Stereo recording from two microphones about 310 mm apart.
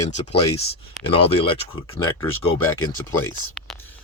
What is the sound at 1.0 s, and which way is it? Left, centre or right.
Speech, centre.